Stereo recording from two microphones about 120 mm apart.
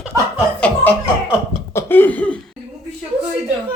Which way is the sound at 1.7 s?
15° left (ahead or behind).